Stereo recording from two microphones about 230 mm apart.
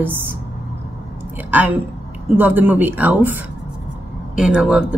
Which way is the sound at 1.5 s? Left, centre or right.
Centre.